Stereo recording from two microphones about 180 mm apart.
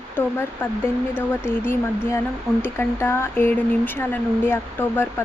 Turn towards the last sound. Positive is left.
turn(degrees=10)  # may be behind; listen again after turning